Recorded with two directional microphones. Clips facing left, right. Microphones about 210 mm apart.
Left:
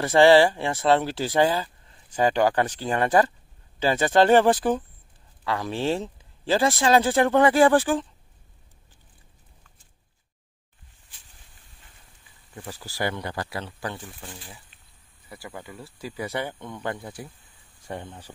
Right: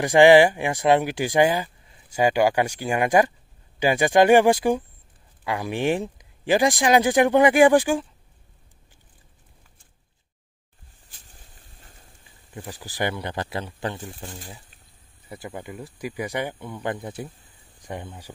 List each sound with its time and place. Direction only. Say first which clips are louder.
0.0 s speech: right 2 dB; 15° right (ahead or behind)
11.8 s a sound: right 5 dB; 40° right (ahead or behind)
12.5 s speech: right 2 dB; 15° right (ahead or behind)
14.0 s speech: right 4 dB; 40° right (ahead or behind)
15.2 s speech: right 4 dB; 20° right (ahead or behind)